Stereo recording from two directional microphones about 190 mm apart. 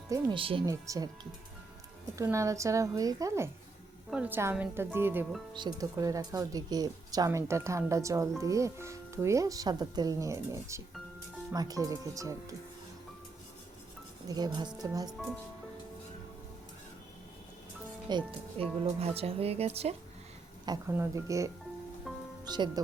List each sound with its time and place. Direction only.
0.1 s speech: 25° right (ahead or behind)
14.3 s speech: 20° right (ahead or behind)
18.1 s speech: 25° right (ahead or behind)
20.9 s speech: 15° right (ahead or behind)
22.1 s music: centre (ahead or behind)
22.4 s speech: 20° right (ahead or behind)